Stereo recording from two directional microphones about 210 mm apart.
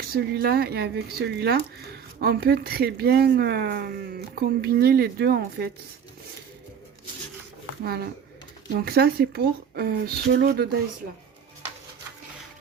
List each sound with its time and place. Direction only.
0.1 s speech: 50° right (ahead or behind)
7.9 s speech: 50° right (ahead or behind)